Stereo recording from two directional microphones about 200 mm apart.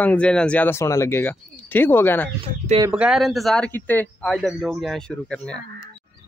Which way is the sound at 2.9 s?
5° right (ahead or behind).